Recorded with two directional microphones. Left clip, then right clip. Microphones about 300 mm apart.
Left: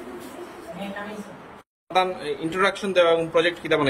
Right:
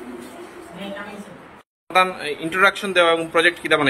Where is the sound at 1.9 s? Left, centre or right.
Centre.